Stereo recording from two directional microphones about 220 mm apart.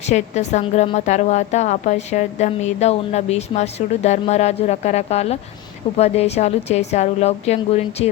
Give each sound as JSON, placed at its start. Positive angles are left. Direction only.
{"t": 0.0, "sound": "a woman's voice", "side_deg": 30}